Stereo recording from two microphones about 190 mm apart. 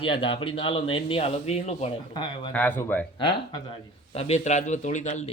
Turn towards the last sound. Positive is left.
turn(degrees=40)  # may be behind; listen again after turning